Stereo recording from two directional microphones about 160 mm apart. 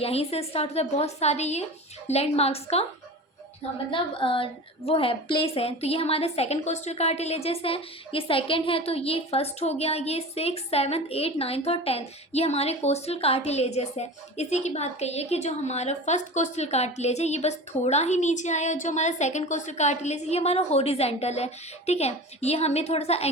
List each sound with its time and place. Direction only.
0.0 s a woman's voice: 40° left (ahead or behind)
3.9 s a woman's voice: 35° left (ahead or behind)